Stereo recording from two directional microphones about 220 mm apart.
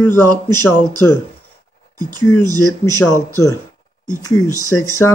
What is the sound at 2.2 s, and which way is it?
Speech, 15° left (ahead or behind).